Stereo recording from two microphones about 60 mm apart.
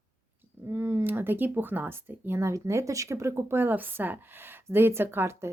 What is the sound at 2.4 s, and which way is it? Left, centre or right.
Speech, right.